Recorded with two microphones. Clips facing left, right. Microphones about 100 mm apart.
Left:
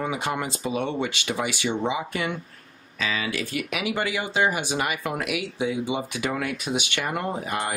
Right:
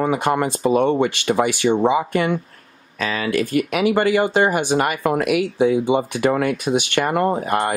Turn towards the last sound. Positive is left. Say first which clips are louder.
# right 8 dB
turn(degrees=-50)  # may be behind; listen again after turning